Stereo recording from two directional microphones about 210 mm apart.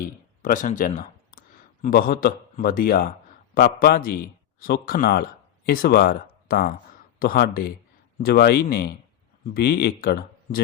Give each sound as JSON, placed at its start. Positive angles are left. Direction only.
{"t": 0.4, "sound": "speech", "side_deg": 40}